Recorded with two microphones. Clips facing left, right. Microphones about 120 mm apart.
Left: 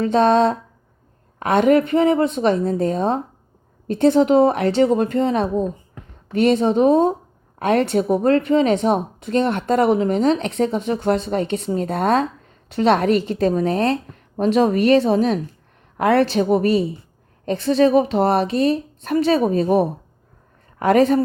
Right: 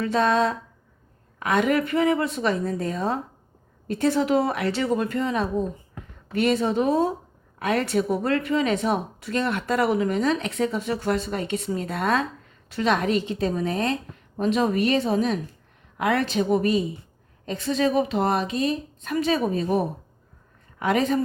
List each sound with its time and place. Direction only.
0.0 s a woman's voice: 30° left (ahead or behind)
13.1 s a woman's voice: 45° left (ahead or behind)
20.7 s a woman's voice: 45° left (ahead or behind)